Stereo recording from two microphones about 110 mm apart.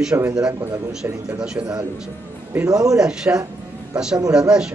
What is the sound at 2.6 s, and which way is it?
Speech, 35° right (ahead or behind).